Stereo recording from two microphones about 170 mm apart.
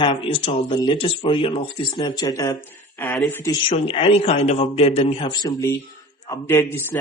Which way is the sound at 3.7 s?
30° left (ahead or behind).